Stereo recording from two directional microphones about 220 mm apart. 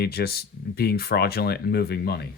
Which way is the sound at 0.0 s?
45° left (ahead or behind).